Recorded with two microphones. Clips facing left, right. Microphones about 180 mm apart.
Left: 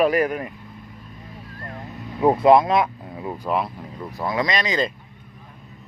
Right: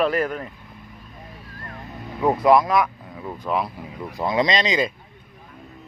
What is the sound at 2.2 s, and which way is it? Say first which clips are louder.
Speech: left 2 dB; 25° left (ahead or behind).